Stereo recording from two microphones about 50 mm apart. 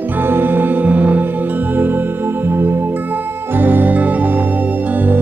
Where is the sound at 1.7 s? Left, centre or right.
Right.